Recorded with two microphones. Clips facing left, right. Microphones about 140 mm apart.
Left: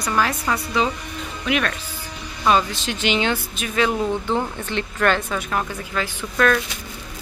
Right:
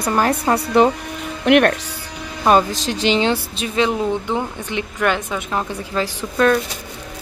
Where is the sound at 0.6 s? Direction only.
60° right (ahead or behind).